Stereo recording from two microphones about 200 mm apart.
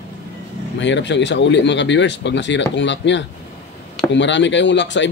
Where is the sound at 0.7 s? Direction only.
65° left (ahead or behind).